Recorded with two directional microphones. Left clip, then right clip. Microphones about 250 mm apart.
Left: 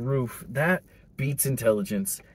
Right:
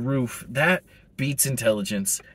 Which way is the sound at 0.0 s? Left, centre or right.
Centre.